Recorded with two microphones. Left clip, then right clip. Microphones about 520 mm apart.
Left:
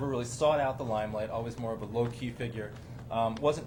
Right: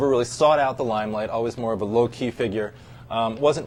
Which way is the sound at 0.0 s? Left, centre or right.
Right.